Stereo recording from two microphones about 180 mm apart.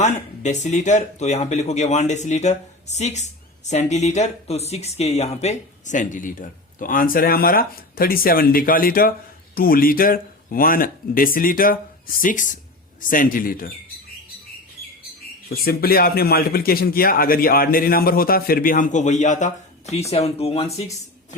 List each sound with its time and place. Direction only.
0.0 s a man's voice: 40° left (ahead or behind)
15.4 s a man's voice: 55° left (ahead or behind); by 21.3 s 40° left (ahead or behind)